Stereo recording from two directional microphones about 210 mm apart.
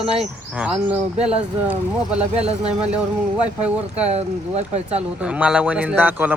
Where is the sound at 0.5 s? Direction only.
5° right (ahead or behind).